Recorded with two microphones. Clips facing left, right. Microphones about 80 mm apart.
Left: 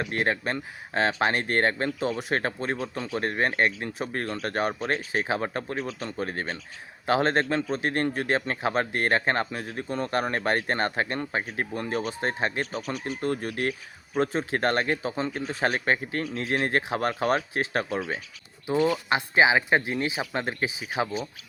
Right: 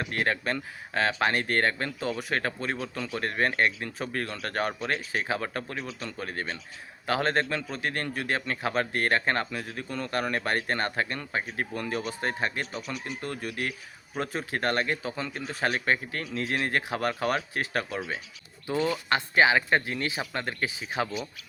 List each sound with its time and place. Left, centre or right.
0.0 s a man's voice: left
4.4 s a man's voice: left
4.8 s a man's voice: left
18.6 s a man's voice: centre